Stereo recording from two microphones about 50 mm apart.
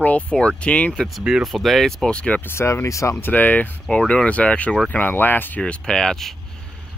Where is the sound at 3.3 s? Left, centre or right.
Left.